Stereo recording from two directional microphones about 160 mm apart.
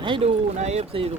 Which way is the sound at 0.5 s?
45° right (ahead or behind).